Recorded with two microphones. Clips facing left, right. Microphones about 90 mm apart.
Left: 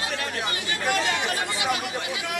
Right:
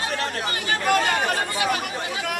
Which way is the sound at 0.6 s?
50° right (ahead or behind).